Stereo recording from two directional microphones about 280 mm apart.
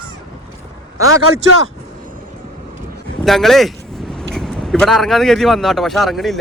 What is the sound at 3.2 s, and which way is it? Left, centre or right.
Speech, centre.